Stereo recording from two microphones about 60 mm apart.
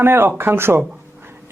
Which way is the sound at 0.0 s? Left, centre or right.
Right.